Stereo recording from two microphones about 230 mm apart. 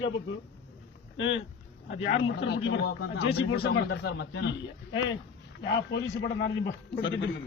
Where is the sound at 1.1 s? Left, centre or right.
Left.